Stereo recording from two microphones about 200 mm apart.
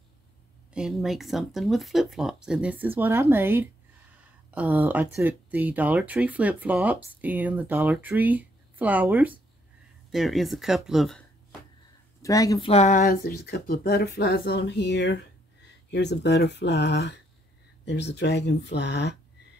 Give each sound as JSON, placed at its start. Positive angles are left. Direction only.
{"t": 0.7, "sound": "speech", "side_deg": 0}
{"t": 12.2, "sound": "speech", "side_deg": 15}
{"t": 13.0, "sound": "speech", "side_deg": 45}